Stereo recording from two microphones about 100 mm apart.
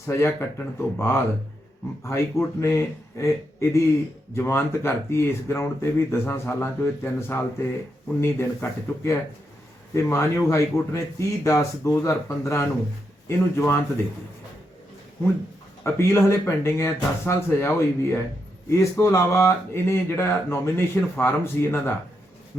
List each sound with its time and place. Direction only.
0.0 s speech: 25° left (ahead or behind)
15.8 s speech: 25° left (ahead or behind)